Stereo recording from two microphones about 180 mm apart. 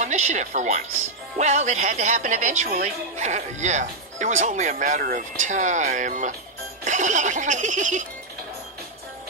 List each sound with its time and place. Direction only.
0.0 s speech: 40° right (ahead or behind)